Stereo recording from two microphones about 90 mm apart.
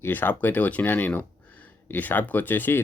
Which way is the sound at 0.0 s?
20° left (ahead or behind).